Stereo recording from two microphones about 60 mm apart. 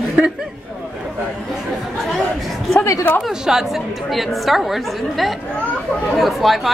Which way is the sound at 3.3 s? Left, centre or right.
Centre.